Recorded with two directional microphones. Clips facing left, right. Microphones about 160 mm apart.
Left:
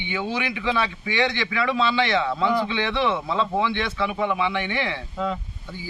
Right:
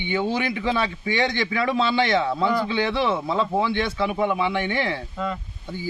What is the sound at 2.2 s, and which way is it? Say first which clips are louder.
Speech: right 1 dB; 10° right (ahead or behind).